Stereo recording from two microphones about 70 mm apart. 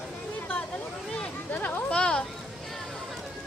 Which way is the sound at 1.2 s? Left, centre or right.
Left.